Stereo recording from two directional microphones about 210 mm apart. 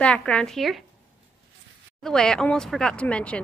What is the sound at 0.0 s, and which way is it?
Speech, 5° left (ahead or behind).